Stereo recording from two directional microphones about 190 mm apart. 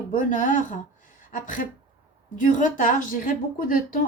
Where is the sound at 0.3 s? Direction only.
45° left (ahead or behind).